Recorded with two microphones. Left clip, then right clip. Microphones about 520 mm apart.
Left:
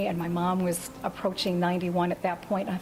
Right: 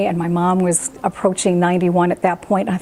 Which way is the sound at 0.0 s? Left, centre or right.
Right.